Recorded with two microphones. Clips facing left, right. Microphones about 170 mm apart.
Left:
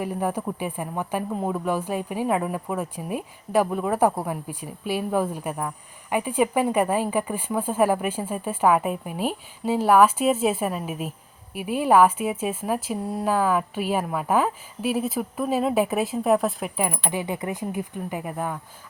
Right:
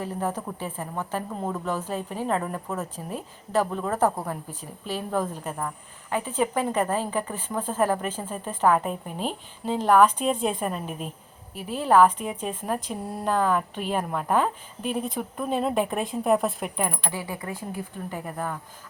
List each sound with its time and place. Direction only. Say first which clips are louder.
0.0 s a woman's voice: left 3 dB; 10° left (ahead or behind)
17.1 s speech: left 5 dB; 20° left (ahead or behind)